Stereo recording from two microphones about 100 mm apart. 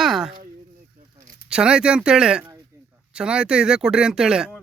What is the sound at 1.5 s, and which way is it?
Speech, 10° right (ahead or behind).